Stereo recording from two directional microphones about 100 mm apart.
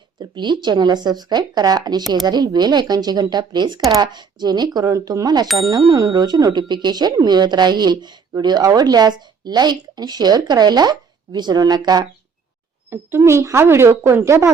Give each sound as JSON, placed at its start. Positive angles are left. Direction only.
{"t": 0.2, "sound": "speech", "side_deg": -50}
{"t": 12.9, "sound": "a woman's voice", "side_deg": -25}